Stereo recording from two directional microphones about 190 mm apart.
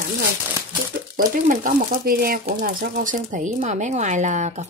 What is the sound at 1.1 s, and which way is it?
Speech, 45° right (ahead or behind).